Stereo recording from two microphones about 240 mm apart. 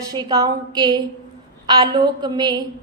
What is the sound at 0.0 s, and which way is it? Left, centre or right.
Speech, centre.